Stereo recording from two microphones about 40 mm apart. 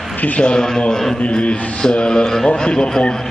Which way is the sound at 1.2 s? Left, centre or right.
Left.